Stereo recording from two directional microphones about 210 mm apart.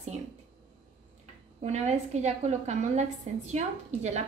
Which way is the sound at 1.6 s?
35° right (ahead or behind).